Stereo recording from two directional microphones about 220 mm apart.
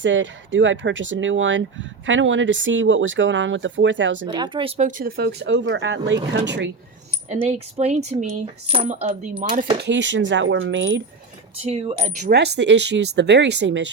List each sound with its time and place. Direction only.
0.0 s speech: 60° right (ahead or behind)
4.3 s coin: 20° right (ahead or behind)
4.8 s speech: 35° right (ahead or behind)
7.3 s speech: 30° right (ahead or behind)
9.8 s speech: 55° right (ahead or behind)
11.5 s coin: 25° right (ahead or behind)
12.2 s speech: 45° right (ahead or behind)